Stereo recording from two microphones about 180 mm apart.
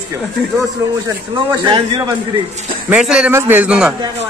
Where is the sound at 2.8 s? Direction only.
5° right (ahead or behind).